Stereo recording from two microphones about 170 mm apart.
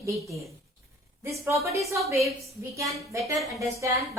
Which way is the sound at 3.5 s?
20° right (ahead or behind).